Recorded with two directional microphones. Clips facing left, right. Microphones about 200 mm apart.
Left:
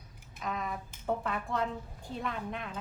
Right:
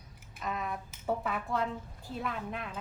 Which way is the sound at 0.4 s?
Centre (ahead or behind).